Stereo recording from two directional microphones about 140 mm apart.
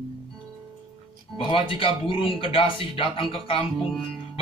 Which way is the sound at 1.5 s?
40° left (ahead or behind).